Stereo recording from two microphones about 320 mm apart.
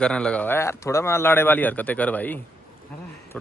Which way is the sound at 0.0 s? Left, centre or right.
Centre.